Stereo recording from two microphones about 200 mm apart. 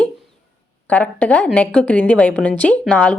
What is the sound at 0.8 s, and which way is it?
Speech, 5° left (ahead or behind).